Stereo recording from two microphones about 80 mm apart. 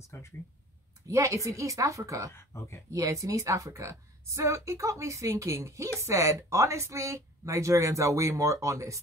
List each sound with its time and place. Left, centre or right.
0.1 s speech: left
1.0 s a woman's voice: right
2.3 s speech: left
2.9 s speech: right